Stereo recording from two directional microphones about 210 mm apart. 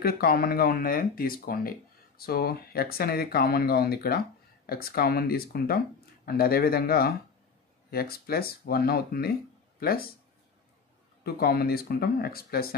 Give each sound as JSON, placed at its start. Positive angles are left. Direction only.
{"t": 0.0, "sound": "speech", "side_deg": 45}
{"t": 11.2, "sound": "speech", "side_deg": 45}